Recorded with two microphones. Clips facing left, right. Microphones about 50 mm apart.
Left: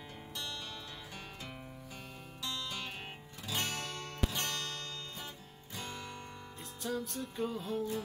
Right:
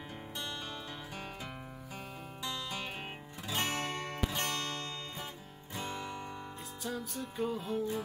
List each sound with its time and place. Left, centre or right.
2.4 s music: centre
3.4 s music: right
5.8 s music: centre
6.8 s music: centre